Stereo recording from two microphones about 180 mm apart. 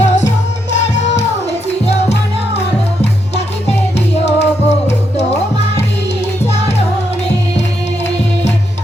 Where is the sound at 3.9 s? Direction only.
35° left (ahead or behind).